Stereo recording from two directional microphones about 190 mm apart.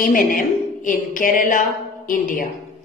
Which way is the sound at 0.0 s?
45° left (ahead or behind).